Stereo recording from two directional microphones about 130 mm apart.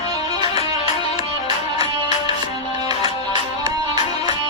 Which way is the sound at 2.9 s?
45° left (ahead or behind).